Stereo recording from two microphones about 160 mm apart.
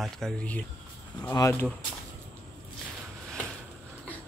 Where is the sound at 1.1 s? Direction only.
20° left (ahead or behind).